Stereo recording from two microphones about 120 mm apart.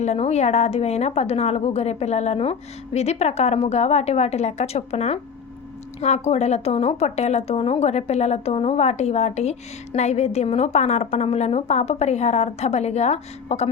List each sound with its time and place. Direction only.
0.0 s a woman's voice: 65° left (ahead or behind)